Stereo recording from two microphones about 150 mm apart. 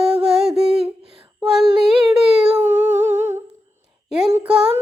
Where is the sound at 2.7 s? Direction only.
55° right (ahead or behind).